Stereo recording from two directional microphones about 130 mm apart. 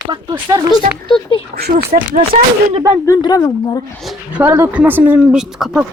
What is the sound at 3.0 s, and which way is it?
Speech, 30° left (ahead or behind).